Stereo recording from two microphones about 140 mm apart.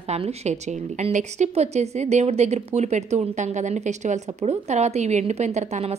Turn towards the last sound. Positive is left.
turn(degrees=-50)  # may be behind; listen again after turning